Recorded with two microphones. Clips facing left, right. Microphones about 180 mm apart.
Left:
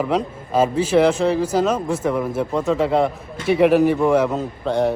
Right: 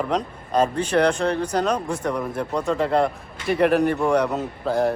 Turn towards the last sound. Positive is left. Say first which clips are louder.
# left 2 dB
turn(degrees=0)  # may be behind; listen again after turning